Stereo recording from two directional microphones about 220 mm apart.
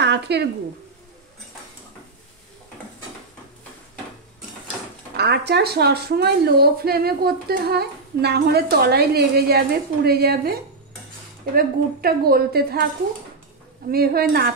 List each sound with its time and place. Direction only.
0.0 s a sound: 50° right (ahead or behind)
5.1 s a woman's voice: 50° right (ahead or behind)
13.8 s a woman's voice: 45° right (ahead or behind)